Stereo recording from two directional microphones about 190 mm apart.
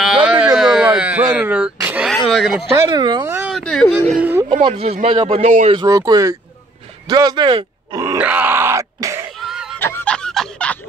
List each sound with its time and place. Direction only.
0.0 s a sound: 5° right (ahead or behind)
2.7 s speech: 20° right (ahead or behind)
3.3 s speech: 5° right (ahead or behind)
4.5 s speech: 25° right (ahead or behind)
5.8 s speech: 20° right (ahead or behind)
8.2 s groan: 10° right (ahead or behind)
9.4 s a sound: centre (ahead or behind)
9.8 s fowl: 10° left (ahead or behind)